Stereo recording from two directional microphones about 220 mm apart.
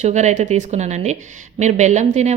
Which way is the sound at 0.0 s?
30° right (ahead or behind).